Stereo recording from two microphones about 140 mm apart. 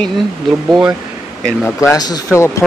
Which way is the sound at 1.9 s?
25° left (ahead or behind).